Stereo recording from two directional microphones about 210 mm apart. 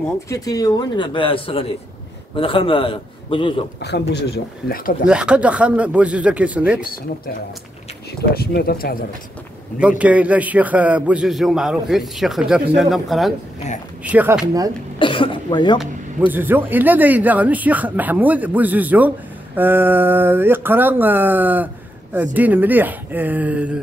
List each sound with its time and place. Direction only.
0.3 s speech: 15° left (ahead or behind)
3.8 s speech: 55° left (ahead or behind)
5.0 s a man's voice: 5° right (ahead or behind)
8.2 s speech: 50° left (ahead or behind)
9.8 s a man's voice: 5° right (ahead or behind)
15.0 s speech: 25° left (ahead or behind)
15.8 s speech: 10° right (ahead or behind)